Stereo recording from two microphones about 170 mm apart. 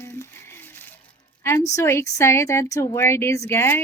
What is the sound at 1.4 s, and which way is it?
A woman's voice, 15° left (ahead or behind).